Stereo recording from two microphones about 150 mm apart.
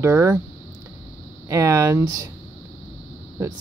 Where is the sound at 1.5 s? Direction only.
15° right (ahead or behind).